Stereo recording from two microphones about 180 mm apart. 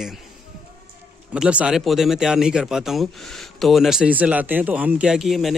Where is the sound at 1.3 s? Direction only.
5° right (ahead or behind).